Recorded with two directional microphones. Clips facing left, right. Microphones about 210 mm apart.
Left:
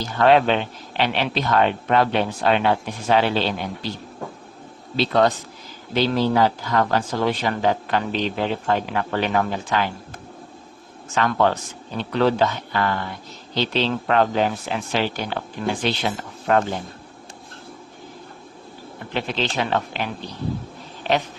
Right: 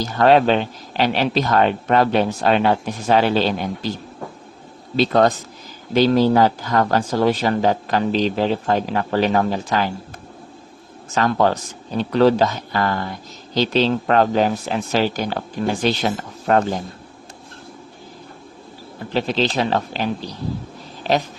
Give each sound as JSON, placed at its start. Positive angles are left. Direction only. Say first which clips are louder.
{"t": 0.0, "sound": "a man's voice", "louder": "right 2 dB", "side_deg": -40}
{"t": 4.9, "sound": "a man's voice", "louder": "right 3 dB", "side_deg": -45}
{"t": 11.1, "sound": "a man's voice", "louder": "right 2 dB", "side_deg": -40}
{"t": 19.1, "sound": "a man's voice", "louder": "right 5 dB", "side_deg": -35}